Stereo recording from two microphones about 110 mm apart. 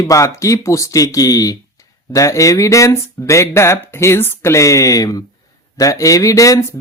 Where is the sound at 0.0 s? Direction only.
30° left (ahead or behind).